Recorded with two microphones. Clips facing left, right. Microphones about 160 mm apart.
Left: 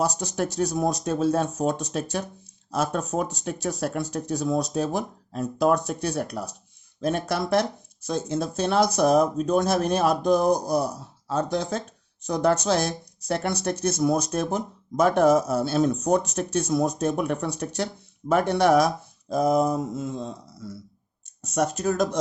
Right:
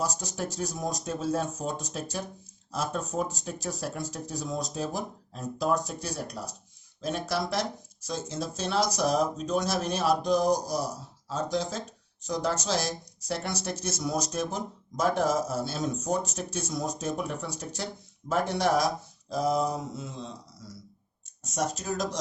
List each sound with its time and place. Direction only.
0.0 s speech: 70° left (ahead or behind)